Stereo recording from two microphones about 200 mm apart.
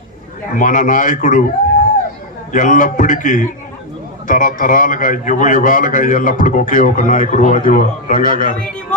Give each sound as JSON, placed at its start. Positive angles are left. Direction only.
{"t": 0.5, "sound": "a man's voice", "side_deg": 40}
{"t": 2.5, "sound": "a man's voice", "side_deg": 40}